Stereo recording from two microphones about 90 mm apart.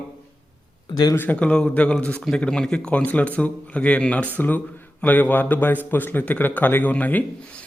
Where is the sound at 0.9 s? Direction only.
50° left (ahead or behind).